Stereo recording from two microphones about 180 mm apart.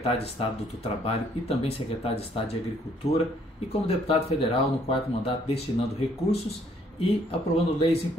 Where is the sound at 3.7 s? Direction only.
35° left (ahead or behind).